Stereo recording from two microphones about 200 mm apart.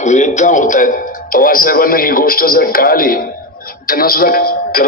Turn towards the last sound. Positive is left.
turn(degrees=50)  # may be behind; listen again after turning